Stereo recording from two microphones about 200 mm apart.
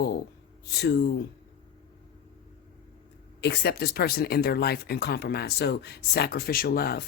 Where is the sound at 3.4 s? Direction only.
55° left (ahead or behind).